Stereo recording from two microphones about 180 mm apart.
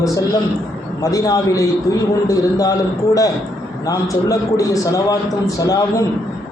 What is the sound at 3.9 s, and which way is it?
A man's voice, 20° left (ahead or behind).